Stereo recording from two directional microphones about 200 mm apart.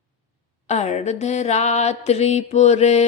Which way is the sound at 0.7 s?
35° left (ahead or behind).